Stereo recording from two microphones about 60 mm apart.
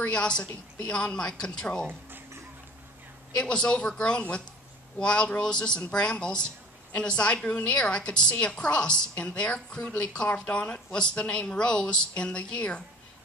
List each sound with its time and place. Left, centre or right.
0.1 s speech: centre
1.9 s a sound: right
3.3 s speech: centre